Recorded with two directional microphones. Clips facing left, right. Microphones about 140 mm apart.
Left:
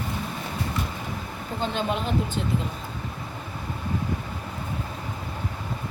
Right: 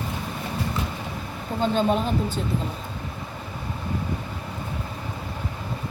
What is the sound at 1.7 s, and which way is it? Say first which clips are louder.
Speech: right 4 dB; 35° right (ahead or behind).